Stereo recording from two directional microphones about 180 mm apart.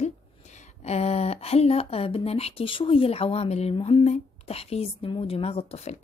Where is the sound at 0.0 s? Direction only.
40° left (ahead or behind).